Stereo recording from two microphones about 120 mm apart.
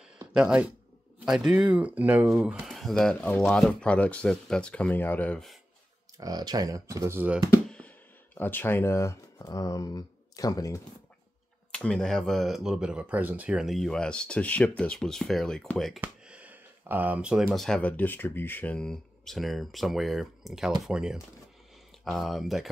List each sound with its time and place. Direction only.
0.3 s speech: 10° right (ahead or behind); by 5.4 s 15° left (ahead or behind)
6.1 s speech: 35° right (ahead or behind)
7.6 s music: 10° left (ahead or behind)
8.4 s speech: 15° left (ahead or behind)
11.7 s speech: 5° left (ahead or behind)
16.0 s a sound: 10° right (ahead or behind)
17.5 s speech: 5° left (ahead or behind)